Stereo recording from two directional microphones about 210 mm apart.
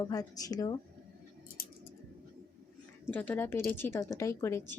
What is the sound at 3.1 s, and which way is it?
A woman's voice, 5° left (ahead or behind).